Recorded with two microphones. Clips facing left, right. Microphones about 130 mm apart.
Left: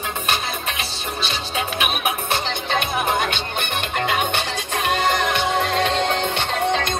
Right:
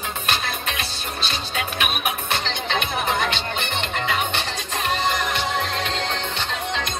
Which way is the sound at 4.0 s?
55° left (ahead or behind).